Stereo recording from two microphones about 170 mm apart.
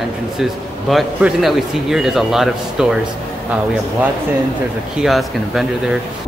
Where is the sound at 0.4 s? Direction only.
Centre (ahead or behind).